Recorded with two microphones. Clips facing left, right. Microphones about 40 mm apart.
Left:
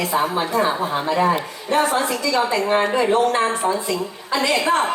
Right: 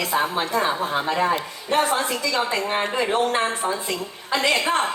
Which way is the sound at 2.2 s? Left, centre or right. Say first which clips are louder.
Left 4 dB; right.